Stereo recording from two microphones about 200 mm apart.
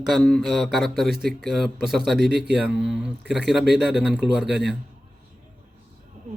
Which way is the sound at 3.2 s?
60° right (ahead or behind).